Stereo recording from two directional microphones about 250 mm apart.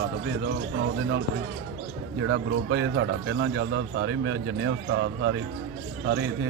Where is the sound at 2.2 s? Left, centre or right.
Right.